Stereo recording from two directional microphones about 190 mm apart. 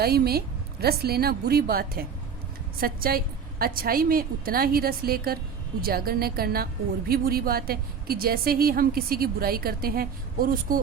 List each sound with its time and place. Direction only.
0.0 s a woman's voice: 55° right (ahead or behind)